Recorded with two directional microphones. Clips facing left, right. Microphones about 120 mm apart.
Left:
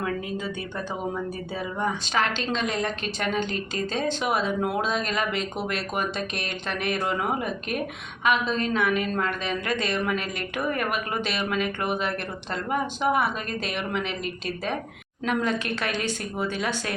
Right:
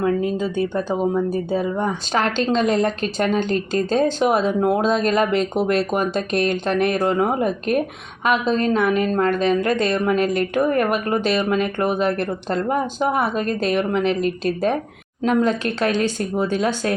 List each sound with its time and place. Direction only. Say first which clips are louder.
0.0 s a woman's voice: right 9 dB; 35° right (ahead or behind)